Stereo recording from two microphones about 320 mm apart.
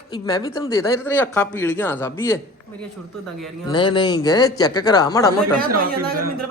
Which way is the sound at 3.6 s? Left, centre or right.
Centre.